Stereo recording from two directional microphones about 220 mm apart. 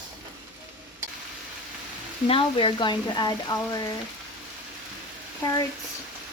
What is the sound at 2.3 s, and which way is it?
Speech, 25° left (ahead or behind).